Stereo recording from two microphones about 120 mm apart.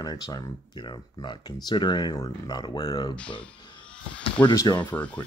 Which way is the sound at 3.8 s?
10° left (ahead or behind).